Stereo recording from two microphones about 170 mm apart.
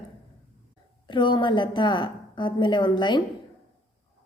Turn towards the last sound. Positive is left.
turn(degrees=25)  # may be behind; listen again after turning